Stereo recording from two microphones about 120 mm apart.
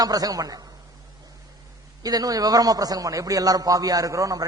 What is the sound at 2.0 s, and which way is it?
A man's voice, 30° right (ahead or behind).